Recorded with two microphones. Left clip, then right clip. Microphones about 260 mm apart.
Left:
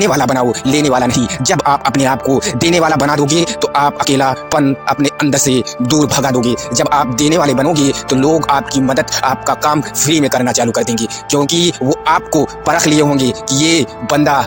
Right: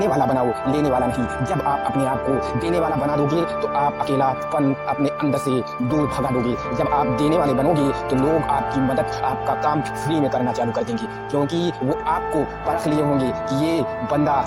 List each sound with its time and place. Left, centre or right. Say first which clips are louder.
0.0 s speech: left 6 dB; left